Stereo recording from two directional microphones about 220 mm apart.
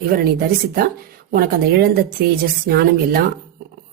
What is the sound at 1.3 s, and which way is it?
Speech, 45° right (ahead or behind).